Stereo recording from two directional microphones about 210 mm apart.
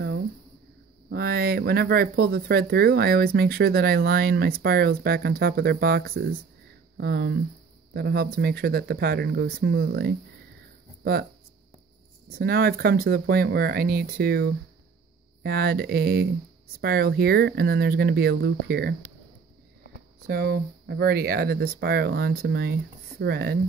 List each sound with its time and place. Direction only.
1.1 s speech: 45° right (ahead or behind)
12.3 s speech: 45° right (ahead or behind)
20.2 s speech: 45° right (ahead or behind)